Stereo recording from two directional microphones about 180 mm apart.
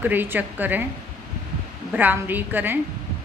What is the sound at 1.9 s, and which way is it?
Speech, 10° right (ahead or behind).